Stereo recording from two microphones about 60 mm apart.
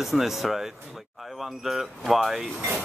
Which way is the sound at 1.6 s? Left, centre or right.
Centre.